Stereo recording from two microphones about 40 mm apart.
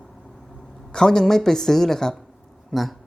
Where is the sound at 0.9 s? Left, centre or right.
Centre.